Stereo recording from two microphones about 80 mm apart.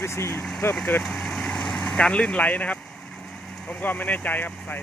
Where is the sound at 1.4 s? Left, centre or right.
Centre.